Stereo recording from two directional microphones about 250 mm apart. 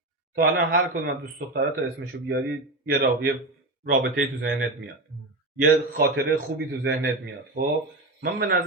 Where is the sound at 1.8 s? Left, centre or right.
Right.